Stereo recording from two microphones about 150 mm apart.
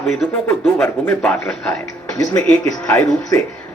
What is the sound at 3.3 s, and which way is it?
Speech, 20° left (ahead or behind).